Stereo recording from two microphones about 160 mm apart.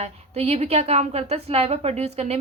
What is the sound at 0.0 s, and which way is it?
A woman's voice, 40° right (ahead or behind).